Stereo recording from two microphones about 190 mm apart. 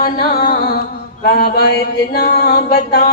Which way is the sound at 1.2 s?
55° left (ahead or behind).